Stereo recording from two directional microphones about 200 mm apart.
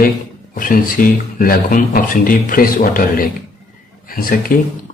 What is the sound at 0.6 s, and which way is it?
Speech, 45° left (ahead or behind).